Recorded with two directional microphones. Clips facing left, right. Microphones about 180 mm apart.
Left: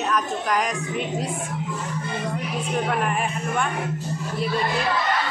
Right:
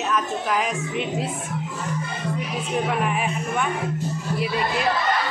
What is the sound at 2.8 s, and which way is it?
Speech, 5° right (ahead or behind).